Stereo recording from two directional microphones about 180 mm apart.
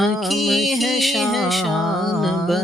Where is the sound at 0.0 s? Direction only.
Centre (ahead or behind).